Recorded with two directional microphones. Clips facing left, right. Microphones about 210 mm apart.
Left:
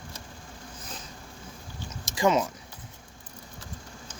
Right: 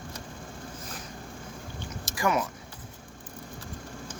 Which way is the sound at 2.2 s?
20° left (ahead or behind).